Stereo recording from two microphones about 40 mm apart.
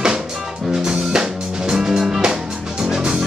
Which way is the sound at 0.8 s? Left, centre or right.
Centre.